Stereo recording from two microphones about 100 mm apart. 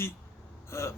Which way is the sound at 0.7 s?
25° left (ahead or behind).